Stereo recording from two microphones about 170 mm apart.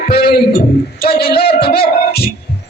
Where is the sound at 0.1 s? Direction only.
65° left (ahead or behind).